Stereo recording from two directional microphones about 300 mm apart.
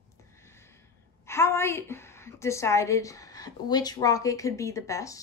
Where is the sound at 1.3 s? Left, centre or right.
Centre.